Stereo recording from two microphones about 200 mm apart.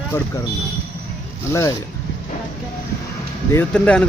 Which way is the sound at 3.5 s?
5° left (ahead or behind).